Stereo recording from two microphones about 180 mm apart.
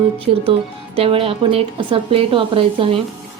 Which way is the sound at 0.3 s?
35° right (ahead or behind).